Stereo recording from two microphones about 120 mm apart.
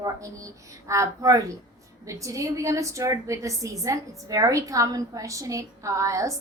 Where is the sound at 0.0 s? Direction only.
25° right (ahead or behind).